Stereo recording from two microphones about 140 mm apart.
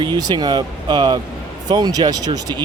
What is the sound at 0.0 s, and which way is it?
Speech, 30° right (ahead or behind).